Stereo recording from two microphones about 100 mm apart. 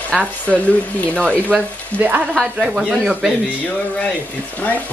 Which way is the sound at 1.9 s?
20° right (ahead or behind).